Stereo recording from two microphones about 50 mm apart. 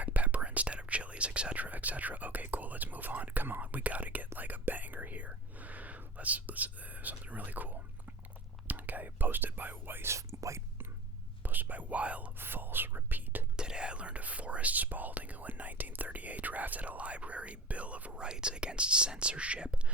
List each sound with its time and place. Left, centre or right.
0.0 s whispering: right
10.1 s whispering: right
11.4 s whispering: right
12.4 s whispering: right
13.6 s whispering: centre
18.3 s whispering: centre